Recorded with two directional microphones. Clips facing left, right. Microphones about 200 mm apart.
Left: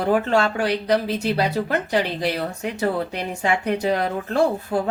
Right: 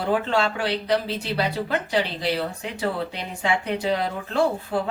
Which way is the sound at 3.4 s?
45° left (ahead or behind).